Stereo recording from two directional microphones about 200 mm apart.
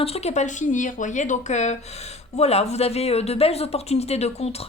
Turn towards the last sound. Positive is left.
turn(degrees=30)  # may be behind; listen again after turning